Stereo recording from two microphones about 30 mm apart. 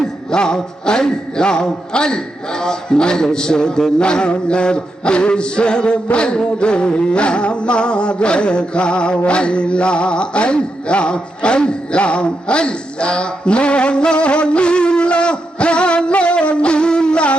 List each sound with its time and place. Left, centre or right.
0.3 s music: left